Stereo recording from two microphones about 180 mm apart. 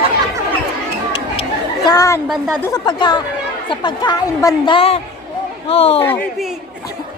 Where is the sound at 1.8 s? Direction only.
20° left (ahead or behind).